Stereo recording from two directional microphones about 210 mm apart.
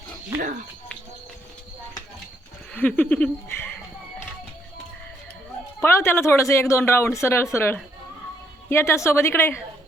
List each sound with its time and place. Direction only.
2.7 s speech: 5° left (ahead or behind)
5.8 s speech: 10° left (ahead or behind)